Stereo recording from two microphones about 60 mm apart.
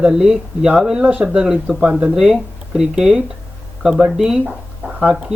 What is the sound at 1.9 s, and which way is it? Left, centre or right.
Speech, right.